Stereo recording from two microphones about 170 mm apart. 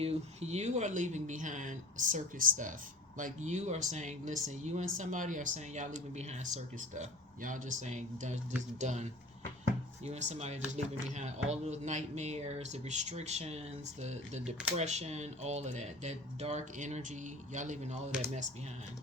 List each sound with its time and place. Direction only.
0.0 s speech: 40° right (ahead or behind)
10.1 s speech: 40° right (ahead or behind)